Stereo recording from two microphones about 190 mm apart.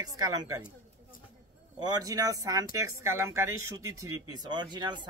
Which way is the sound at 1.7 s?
20° right (ahead or behind).